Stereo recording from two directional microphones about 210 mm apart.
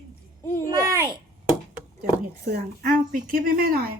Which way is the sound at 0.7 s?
15° right (ahead or behind).